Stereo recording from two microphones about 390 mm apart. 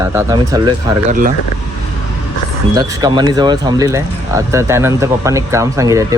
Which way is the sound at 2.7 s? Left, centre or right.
Centre.